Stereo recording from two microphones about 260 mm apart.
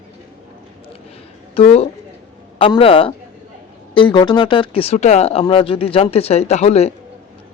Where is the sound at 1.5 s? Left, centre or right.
Left.